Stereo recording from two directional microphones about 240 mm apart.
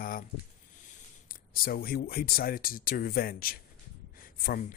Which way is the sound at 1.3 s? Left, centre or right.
Left.